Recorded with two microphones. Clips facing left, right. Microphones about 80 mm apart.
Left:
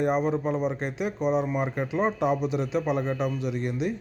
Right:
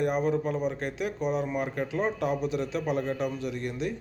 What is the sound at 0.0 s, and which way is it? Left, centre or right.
Speech, left.